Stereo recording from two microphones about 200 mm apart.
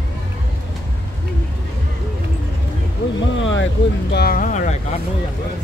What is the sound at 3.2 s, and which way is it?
Vehicle, 70° left (ahead or behind).